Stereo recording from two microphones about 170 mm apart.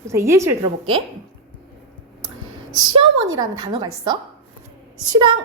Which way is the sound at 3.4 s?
25° right (ahead or behind).